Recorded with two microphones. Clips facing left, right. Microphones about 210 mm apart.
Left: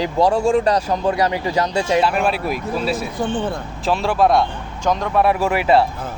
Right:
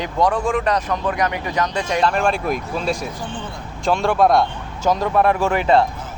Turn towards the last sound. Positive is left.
turn(degrees=5)  # may be behind; listen again after turning